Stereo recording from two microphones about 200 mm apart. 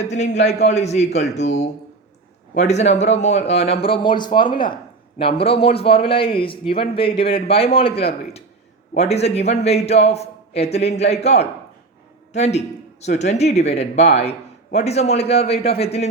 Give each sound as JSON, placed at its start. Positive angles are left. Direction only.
{"t": 0.1, "sound": "a man's voice", "side_deg": 35}